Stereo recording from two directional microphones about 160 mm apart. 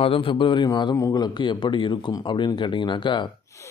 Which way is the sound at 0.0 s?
35° left (ahead or behind).